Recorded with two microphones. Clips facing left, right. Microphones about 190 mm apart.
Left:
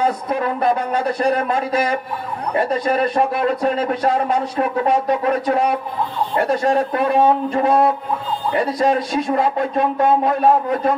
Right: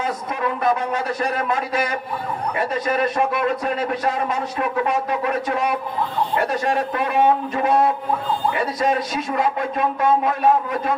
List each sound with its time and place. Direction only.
0.0 s a man's voice: 35° left (ahead or behind)